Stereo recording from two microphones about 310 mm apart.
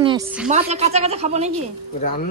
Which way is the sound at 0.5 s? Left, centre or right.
Right.